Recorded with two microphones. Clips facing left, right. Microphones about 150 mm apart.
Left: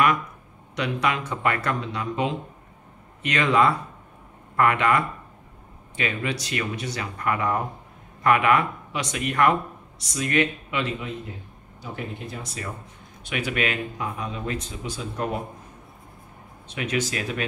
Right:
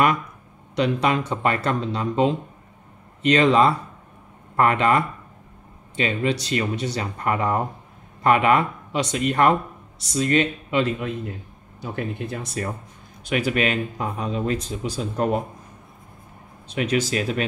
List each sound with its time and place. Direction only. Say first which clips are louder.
0.7 s speech: right 4 dB; 30° right (ahead or behind)
11.8 s speech: right 5 dB; 55° right (ahead or behind); by 15.4 s 35° right (ahead or behind)
16.6 s speech: right 4 dB; 35° right (ahead or behind)